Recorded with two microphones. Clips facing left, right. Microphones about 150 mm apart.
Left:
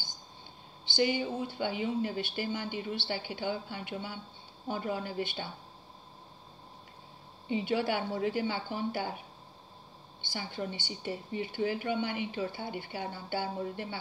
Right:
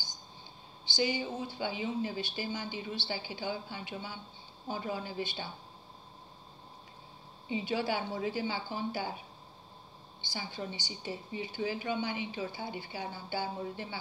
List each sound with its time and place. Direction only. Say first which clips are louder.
0.8 s speech: left 3 dB; 55° left (ahead or behind)
7.4 s speech: left 3 dB; 55° left (ahead or behind)
10.2 s speech: left 3 dB; 55° left (ahead or behind)